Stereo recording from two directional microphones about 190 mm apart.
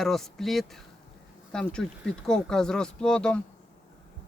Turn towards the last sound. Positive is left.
turn(degrees=5)  # may be behind; listen again after turning